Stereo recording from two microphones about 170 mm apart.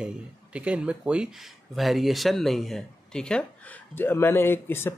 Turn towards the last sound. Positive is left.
turn(degrees=15)  # may be behind; listen again after turning